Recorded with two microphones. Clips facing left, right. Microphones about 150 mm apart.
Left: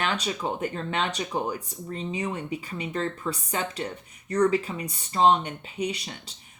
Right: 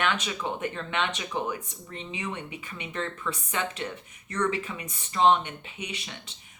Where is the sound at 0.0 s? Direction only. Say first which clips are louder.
Left 1 dB; 35° left (ahead or behind).